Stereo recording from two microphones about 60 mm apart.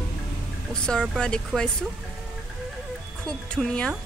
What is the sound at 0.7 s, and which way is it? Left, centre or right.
Speech, centre.